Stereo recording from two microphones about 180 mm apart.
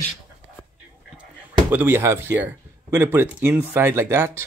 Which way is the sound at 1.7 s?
10° right (ahead or behind).